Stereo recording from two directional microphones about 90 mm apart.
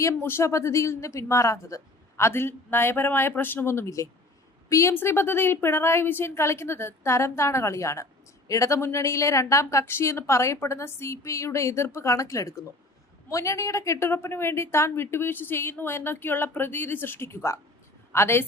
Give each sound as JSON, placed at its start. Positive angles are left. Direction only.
{"t": 0.0, "sound": "a woman's voice", "side_deg": 25}